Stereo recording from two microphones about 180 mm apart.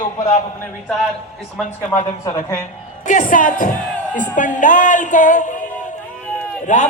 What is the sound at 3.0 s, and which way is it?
Music, 45° left (ahead or behind).